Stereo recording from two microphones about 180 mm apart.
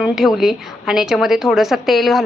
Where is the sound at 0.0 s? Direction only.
Centre (ahead or behind).